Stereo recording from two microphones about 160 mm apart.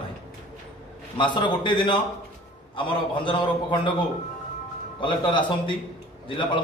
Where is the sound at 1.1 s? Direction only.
30° left (ahead or behind).